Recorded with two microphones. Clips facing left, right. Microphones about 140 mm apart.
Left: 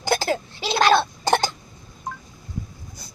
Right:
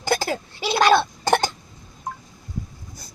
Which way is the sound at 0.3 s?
10° right (ahead or behind).